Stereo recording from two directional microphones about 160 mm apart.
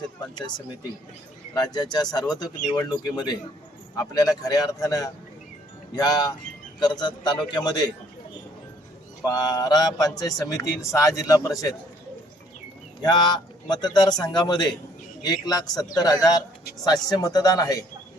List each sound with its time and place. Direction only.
1.5 s speech: 25° left (ahead or behind)
9.2 s speech: 25° left (ahead or behind)
13.0 s speech: 25° left (ahead or behind)